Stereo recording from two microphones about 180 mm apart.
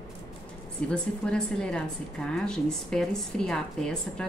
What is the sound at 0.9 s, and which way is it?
A woman's voice, 5° left (ahead or behind).